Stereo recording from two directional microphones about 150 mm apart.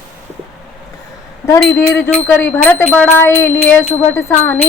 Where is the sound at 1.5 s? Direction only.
15° left (ahead or behind).